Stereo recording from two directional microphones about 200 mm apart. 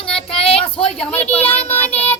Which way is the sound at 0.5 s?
5° left (ahead or behind).